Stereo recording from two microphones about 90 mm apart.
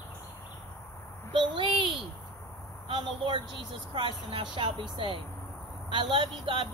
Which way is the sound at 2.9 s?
60° right (ahead or behind).